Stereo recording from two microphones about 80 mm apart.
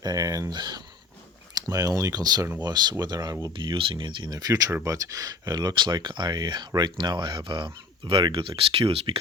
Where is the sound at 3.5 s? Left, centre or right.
Right.